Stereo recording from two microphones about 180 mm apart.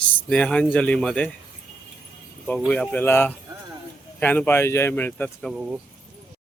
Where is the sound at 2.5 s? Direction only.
5° left (ahead or behind).